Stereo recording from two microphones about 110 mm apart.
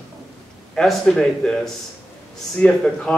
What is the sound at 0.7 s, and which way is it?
Speech, 5° left (ahead or behind).